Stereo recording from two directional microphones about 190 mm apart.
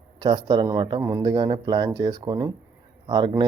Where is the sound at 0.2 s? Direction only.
20° right (ahead or behind).